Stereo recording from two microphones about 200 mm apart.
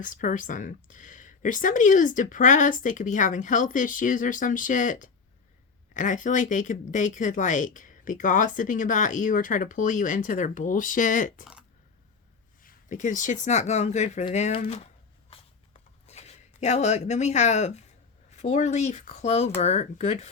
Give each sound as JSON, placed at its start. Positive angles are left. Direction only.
{"t": 0.0, "sound": "speech", "side_deg": 40}
{"t": 12.6, "sound": "speech", "side_deg": 40}
{"t": 15.3, "sound": "a sound", "side_deg": 30}
{"t": 16.0, "sound": "speech", "side_deg": 35}